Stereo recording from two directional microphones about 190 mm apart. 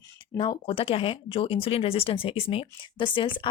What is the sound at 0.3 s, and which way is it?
Speech, 25° left (ahead or behind).